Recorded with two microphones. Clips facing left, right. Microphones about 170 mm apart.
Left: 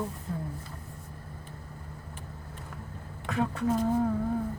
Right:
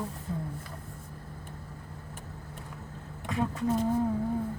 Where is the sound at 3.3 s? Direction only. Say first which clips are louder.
Left 1 dB; centre (ahead or behind).